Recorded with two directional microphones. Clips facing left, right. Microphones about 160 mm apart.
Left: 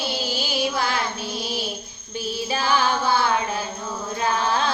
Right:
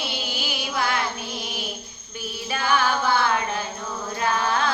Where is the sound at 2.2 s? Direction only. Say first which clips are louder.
Left 3 dB; 30° left (ahead or behind).